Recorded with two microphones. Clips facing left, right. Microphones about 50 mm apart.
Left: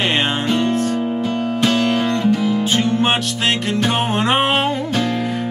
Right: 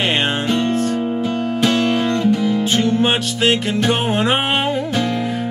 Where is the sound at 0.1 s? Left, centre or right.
Centre.